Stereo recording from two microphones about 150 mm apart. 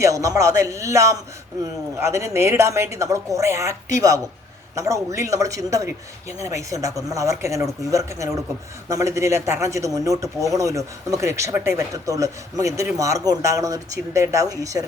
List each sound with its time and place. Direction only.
0.0 s speech: 20° right (ahead or behind)